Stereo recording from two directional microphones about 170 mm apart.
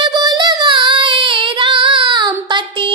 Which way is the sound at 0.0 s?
25° right (ahead or behind).